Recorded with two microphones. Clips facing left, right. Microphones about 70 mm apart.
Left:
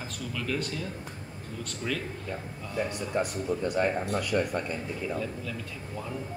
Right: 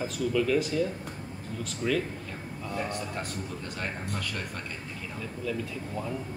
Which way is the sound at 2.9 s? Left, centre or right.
Centre.